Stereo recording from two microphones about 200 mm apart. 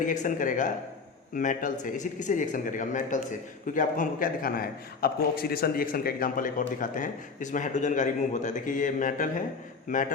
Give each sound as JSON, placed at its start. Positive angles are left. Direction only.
{"t": 0.1, "sound": "a man's voice", "side_deg": 40}